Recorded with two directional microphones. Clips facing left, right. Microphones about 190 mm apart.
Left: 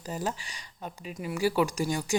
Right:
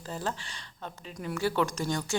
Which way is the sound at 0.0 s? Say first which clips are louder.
Left 2 dB; 15° left (ahead or behind).